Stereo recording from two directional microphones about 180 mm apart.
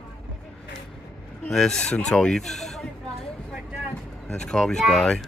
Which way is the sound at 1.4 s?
5° left (ahead or behind).